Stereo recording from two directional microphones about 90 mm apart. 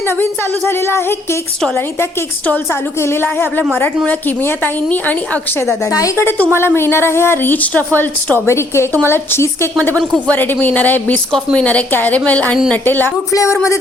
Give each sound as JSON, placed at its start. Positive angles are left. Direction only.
{"t": 0.2, "sound": "a woman's voice", "side_deg": 25}
{"t": 3.0, "sound": "a woman's voice", "side_deg": 25}
{"t": 13.3, "sound": "speech", "side_deg": 35}